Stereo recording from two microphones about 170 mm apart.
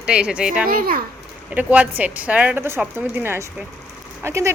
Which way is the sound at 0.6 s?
60° right (ahead or behind).